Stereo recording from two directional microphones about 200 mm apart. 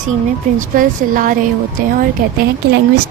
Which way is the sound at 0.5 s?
45° right (ahead or behind).